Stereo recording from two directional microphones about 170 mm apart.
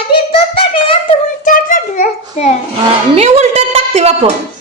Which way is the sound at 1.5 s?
50° left (ahead or behind).